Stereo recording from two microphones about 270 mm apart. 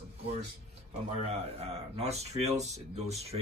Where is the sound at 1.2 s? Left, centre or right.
Right.